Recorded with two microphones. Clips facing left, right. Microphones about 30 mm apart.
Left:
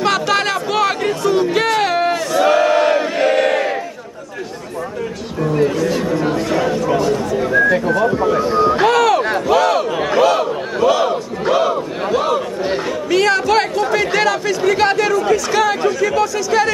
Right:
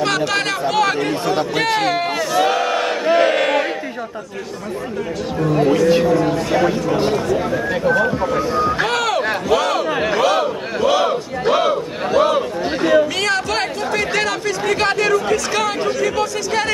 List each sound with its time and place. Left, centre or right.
0.0 s chatter: centre
1.2 s a sound: right
1.8 s battle cry: centre
3.1 s crowd: centre
6.5 s speech: centre
8.5 s speech: left
8.7 s a sound: centre
9.9 s crowd: centre
10.8 s battle cry: centre
13.1 s chatter: centre
16.4 s speech: centre